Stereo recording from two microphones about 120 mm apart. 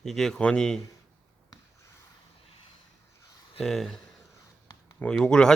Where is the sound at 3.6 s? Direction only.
Centre (ahead or behind).